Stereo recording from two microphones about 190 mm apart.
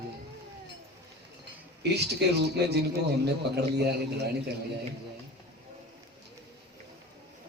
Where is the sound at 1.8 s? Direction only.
60° right (ahead or behind).